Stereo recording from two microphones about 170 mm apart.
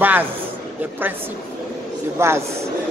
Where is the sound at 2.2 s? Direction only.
15° right (ahead or behind).